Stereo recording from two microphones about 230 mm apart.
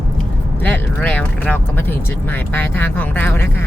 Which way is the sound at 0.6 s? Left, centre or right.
Centre.